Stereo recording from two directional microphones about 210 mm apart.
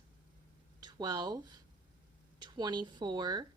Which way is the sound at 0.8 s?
20° right (ahead or behind).